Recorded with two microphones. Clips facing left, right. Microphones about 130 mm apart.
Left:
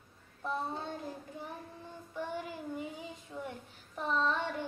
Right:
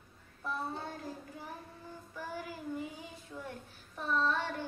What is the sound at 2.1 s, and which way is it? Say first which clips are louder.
Child singing: left 4 dB; 20° left (ahead or behind).